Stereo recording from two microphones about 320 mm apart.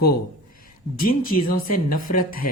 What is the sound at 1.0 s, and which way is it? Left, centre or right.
Speech, left.